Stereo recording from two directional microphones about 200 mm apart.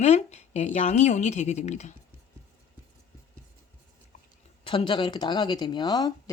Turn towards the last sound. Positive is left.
turn(degrees=20)  # may be behind; listen again after turning